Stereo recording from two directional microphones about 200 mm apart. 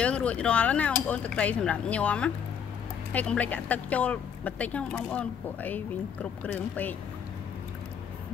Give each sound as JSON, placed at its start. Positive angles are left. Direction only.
{"t": 0.0, "sound": "speech", "side_deg": 5}